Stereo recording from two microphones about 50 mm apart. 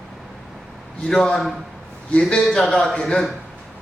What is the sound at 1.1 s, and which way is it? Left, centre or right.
Speech, centre.